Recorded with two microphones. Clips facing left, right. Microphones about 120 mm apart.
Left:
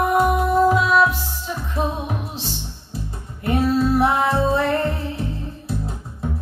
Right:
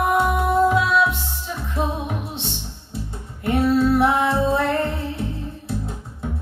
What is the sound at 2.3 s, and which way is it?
Music, centre (ahead or behind).